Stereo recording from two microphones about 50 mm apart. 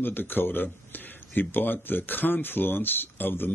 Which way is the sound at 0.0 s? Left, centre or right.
Left.